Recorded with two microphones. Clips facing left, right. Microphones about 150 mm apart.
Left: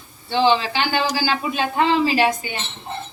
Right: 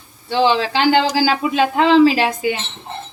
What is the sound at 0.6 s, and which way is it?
A woman's voice, 90° right.